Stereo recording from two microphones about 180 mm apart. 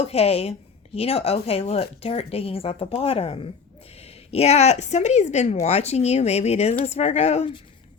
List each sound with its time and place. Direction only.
0.0 s speech: 35° left (ahead or behind)